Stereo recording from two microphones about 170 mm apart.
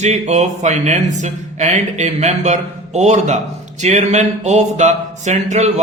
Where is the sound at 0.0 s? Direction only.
40° right (ahead or behind).